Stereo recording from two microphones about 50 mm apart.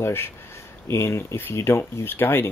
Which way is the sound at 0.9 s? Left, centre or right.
Left.